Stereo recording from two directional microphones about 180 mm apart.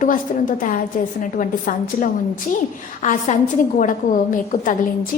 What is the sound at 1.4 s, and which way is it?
A woman's voice, 45° left (ahead or behind).